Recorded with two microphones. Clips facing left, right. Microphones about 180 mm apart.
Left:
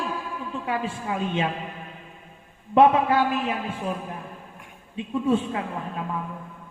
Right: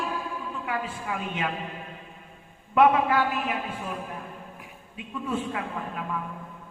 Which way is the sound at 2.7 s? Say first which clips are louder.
Left 3 dB; 25° left (ahead or behind).